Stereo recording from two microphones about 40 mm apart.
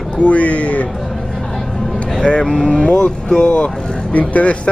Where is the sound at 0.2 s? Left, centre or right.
Left.